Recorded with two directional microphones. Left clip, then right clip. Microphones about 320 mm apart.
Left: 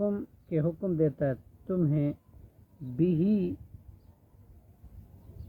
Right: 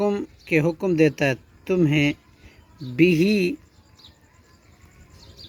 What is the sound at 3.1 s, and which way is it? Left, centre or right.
Speech, right.